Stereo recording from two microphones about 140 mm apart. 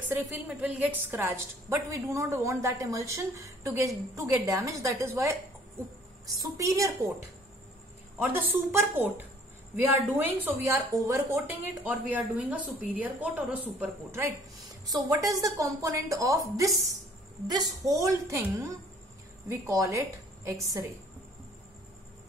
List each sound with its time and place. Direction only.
0.1 s a woman's voice: 10° right (ahead or behind)
8.2 s a woman's voice: 15° right (ahead or behind)
14.9 s a woman's voice: 25° right (ahead or behind)